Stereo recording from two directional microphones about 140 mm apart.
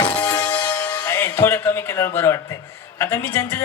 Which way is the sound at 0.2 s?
10° left (ahead or behind).